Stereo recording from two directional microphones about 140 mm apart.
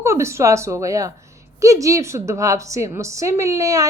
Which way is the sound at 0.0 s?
20° right (ahead or behind).